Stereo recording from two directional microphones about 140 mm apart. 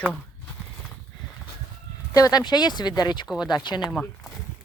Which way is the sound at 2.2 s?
25° left (ahead or behind).